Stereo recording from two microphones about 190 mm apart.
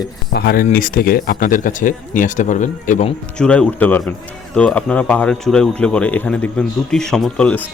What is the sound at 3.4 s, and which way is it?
A man's voice, 5° left (ahead or behind).